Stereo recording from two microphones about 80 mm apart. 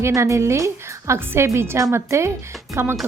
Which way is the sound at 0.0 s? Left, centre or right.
Right.